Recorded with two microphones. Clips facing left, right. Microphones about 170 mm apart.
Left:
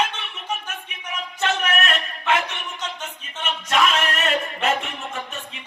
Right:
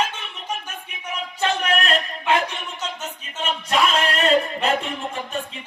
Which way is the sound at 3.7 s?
30° right (ahead or behind).